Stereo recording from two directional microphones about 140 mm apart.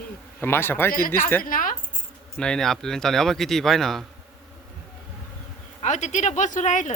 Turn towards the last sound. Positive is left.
turn(degrees=65)  # may be behind; listen again after turning